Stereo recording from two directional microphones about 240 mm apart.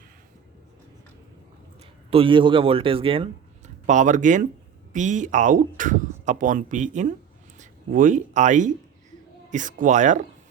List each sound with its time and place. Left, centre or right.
2.0 s a man's voice: right